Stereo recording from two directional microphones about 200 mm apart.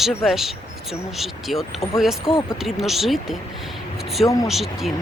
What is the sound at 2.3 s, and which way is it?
Speech, 25° left (ahead or behind).